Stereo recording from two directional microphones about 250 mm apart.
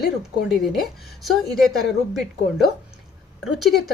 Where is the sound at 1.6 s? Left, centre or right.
Centre.